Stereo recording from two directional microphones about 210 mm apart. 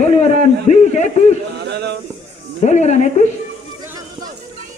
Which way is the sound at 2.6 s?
35° left (ahead or behind).